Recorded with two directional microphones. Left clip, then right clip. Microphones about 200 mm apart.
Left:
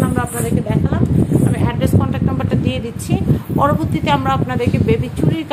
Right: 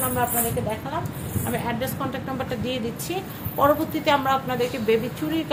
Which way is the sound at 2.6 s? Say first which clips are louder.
Left 5 dB; 35° left (ahead or behind).